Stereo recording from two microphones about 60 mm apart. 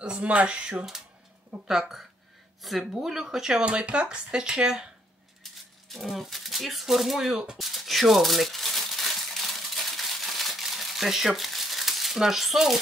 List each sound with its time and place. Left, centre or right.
0.0 s speech: centre
5.9 s speech: centre
9.8 s crumpling: centre